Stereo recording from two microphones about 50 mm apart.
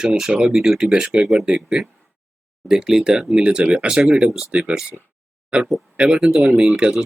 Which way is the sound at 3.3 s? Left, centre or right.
Right.